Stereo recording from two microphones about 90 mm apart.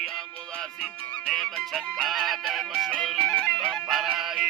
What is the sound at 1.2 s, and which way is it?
Music, 5° left (ahead or behind).